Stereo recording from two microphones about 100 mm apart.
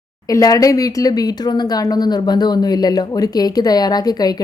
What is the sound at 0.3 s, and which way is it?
Speech, 35° left (ahead or behind).